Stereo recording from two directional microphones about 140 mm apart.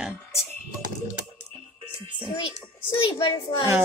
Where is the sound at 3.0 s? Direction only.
35° left (ahead or behind).